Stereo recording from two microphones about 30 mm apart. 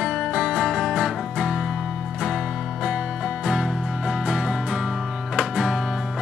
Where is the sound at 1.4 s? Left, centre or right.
Centre.